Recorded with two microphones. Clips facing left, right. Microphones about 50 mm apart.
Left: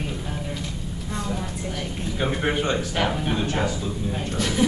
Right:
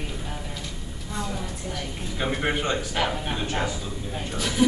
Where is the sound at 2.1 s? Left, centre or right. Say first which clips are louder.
Left 2 dB; centre.